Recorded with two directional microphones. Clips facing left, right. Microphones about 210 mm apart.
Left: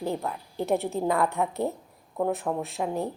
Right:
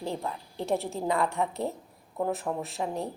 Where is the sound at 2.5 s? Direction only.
40° left (ahead or behind).